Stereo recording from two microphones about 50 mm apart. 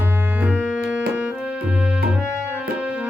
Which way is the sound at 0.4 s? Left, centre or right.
Right.